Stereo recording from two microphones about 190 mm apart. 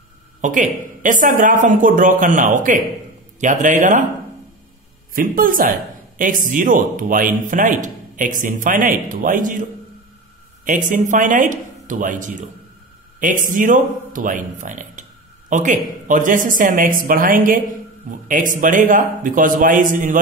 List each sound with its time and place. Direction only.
0.4 s speech: 45° right (ahead or behind)
5.1 s speech: 50° right (ahead or behind)
10.6 s speech: 45° right (ahead or behind)